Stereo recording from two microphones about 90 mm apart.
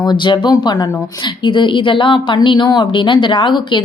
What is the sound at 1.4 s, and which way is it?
Speech, 65° left (ahead or behind).